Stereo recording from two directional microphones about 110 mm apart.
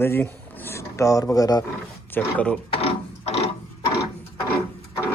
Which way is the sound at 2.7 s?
65° left (ahead or behind).